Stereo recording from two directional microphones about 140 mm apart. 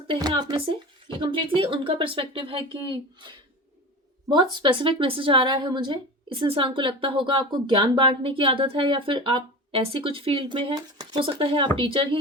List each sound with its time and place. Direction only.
0.1 s a woman's voice: 30° right (ahead or behind)